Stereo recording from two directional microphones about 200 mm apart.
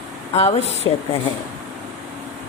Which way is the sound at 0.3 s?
30° left (ahead or behind).